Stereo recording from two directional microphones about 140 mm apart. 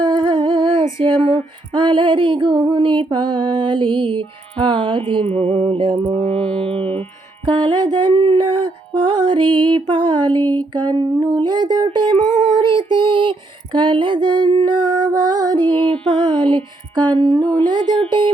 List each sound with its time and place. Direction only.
0.0 s humming: 35° right (ahead or behind)
0.9 s female singing: 35° right (ahead or behind)
6.2 s music: 10° left (ahead or behind)
6.7 s music: 45° right (ahead or behind)
7.4 s music: 30° right (ahead or behind)
12.5 s child singing: 35° right (ahead or behind)
13.7 s female singing: 35° right (ahead or behind)
15.6 s music: 15° left (ahead or behind)
15.9 s music: 35° right (ahead or behind)
17.6 s female singing: 30° right (ahead or behind)